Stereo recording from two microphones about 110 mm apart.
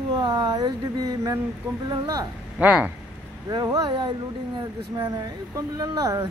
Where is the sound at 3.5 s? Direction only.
35° right (ahead or behind).